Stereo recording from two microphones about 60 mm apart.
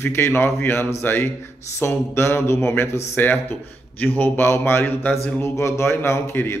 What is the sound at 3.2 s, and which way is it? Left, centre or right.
A man's voice, left.